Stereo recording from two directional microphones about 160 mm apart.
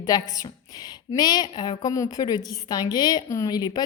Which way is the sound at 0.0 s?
25° left (ahead or behind).